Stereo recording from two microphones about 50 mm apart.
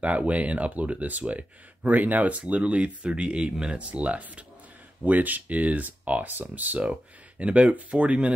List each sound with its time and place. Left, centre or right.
0.0 s speech: right